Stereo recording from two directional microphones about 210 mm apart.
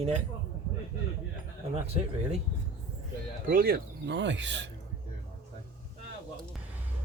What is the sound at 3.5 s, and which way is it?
Speech, 45° right (ahead or behind).